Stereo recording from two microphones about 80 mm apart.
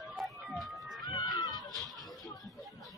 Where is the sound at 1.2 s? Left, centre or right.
Left.